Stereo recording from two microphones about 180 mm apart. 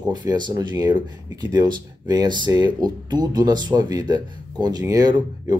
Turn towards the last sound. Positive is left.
turn(degrees=-20)  # may be behind; listen again after turning